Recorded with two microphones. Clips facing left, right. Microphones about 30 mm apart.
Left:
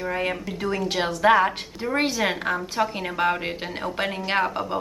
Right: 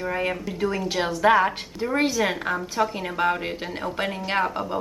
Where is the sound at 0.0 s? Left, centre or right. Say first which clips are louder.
Even; centre.